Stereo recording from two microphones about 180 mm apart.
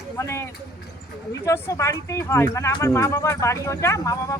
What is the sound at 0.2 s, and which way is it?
Speech, 15° left (ahead or behind).